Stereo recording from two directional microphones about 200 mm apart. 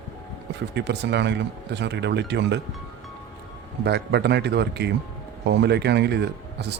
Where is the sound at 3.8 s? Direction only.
55° right (ahead or behind).